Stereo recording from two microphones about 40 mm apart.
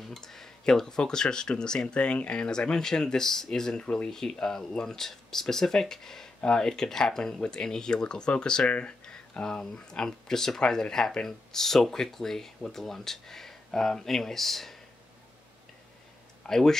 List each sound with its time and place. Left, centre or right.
0.1 s speech: centre
3.8 s speech: left
4.1 s speech: centre
16.4 s speech: centre